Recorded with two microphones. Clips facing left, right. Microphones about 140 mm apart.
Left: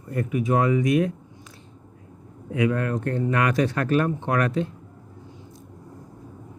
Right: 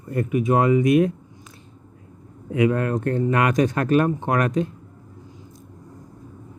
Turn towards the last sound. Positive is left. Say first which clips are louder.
# right 2 dB
turn(degrees=-20)  # may be behind; listen again after turning